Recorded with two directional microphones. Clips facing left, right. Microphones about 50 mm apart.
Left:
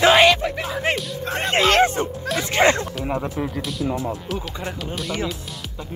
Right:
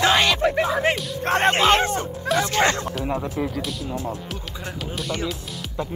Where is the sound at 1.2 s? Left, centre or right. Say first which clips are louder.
Right 8 dB; right.